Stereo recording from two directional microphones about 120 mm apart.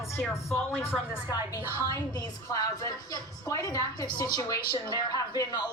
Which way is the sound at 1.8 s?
35° left (ahead or behind).